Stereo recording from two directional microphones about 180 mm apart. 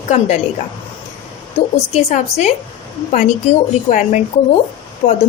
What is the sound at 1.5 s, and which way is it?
A woman's voice, 40° left (ahead or behind).